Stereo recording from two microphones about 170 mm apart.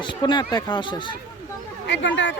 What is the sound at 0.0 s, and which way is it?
Speech, 30° left (ahead or behind).